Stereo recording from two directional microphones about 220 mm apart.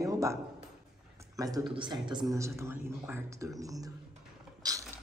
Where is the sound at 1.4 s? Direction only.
15° right (ahead or behind).